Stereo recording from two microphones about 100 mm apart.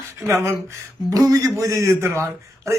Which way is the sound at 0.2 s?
30° right (ahead or behind).